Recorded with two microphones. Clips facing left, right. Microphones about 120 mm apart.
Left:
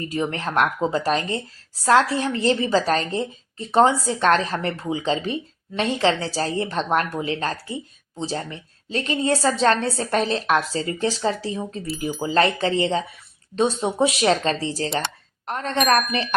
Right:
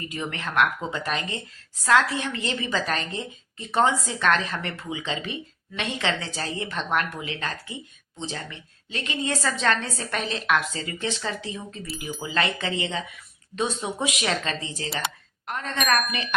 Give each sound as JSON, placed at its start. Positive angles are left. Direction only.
{"t": 0.1, "sound": "a woman's voice", "side_deg": 35}